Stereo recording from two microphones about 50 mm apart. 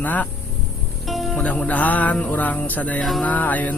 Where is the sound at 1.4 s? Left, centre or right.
Left.